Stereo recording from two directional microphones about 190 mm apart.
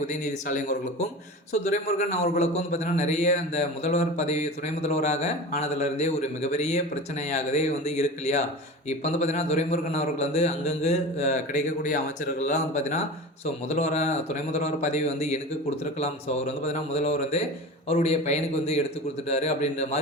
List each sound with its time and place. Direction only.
0.1 s a man's voice: 40° left (ahead or behind)